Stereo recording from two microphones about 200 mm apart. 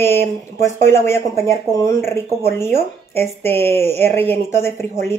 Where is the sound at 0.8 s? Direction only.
15° left (ahead or behind).